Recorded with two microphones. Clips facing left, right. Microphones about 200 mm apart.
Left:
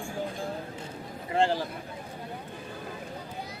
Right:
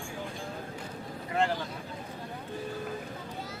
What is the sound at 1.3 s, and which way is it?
Speech, 30° left (ahead or behind).